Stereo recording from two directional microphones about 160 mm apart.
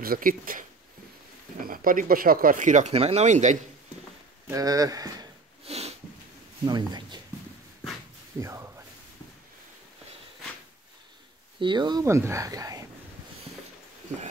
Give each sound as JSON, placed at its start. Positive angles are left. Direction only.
{"t": 0.0, "sound": "speech", "side_deg": -65}
{"t": 4.5, "sound": "speech", "side_deg": -20}
{"t": 5.7, "sound": "a sound", "side_deg": -40}
{"t": 6.6, "sound": "speech", "side_deg": -25}
{"t": 8.4, "sound": "a sound", "side_deg": -15}
{"t": 11.6, "sound": "speech", "side_deg": -30}